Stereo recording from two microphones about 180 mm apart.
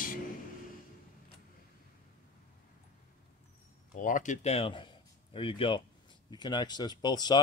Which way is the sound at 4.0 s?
45° left (ahead or behind).